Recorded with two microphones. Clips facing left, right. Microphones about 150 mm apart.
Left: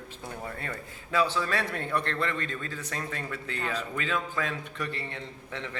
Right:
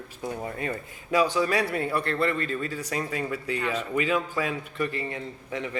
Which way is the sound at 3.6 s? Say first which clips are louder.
Right 1 dB; 35° left (ahead or behind).